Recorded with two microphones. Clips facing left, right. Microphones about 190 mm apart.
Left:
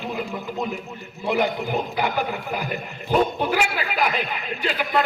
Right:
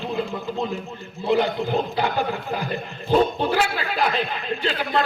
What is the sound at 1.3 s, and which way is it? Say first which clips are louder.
A man's voice: right 2 dB; 15° left (ahead or behind).